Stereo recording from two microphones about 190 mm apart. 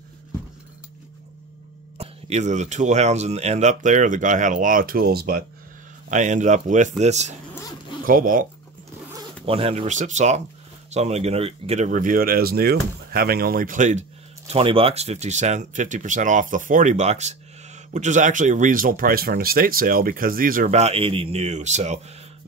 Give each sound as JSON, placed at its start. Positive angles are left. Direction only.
{"t": 2.0, "sound": "speech", "side_deg": -35}
{"t": 6.0, "sound": "speech", "side_deg": -40}
{"t": 7.5, "sound": "zipper", "side_deg": 20}
{"t": 8.0, "sound": "speech", "side_deg": -45}
{"t": 9.5, "sound": "speech", "side_deg": -30}
{"t": 14.5, "sound": "speech", "side_deg": -30}